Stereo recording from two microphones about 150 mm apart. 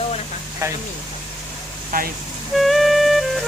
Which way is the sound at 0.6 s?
20° right (ahead or behind).